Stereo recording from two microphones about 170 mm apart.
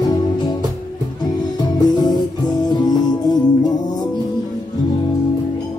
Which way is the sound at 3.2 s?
25° left (ahead or behind).